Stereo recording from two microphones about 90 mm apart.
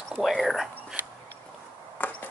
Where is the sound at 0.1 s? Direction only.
Centre (ahead or behind).